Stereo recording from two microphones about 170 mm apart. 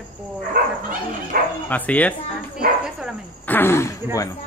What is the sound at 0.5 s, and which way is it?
Bow-wow, 55° right (ahead or behind).